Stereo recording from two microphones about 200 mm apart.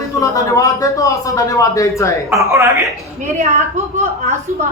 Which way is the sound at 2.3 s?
15° right (ahead or behind).